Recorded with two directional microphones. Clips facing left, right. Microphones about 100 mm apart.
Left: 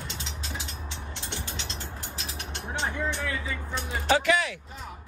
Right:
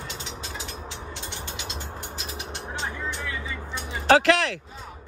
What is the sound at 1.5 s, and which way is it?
Mechanisms, 10° right (ahead or behind).